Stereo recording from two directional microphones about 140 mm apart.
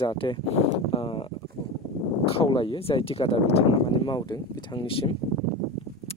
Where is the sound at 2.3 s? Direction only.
40° left (ahead or behind).